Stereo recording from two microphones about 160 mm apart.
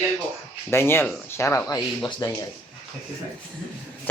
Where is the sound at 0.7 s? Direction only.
15° left (ahead or behind).